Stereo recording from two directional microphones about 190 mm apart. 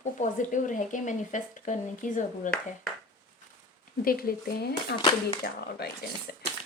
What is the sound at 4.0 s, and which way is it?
Speech, 50° left (ahead or behind).